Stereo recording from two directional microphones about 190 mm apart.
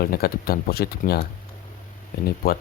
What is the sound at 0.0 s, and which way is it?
Speech, 55° left (ahead or behind).